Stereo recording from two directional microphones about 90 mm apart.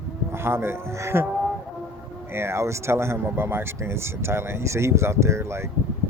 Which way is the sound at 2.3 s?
30° right (ahead or behind).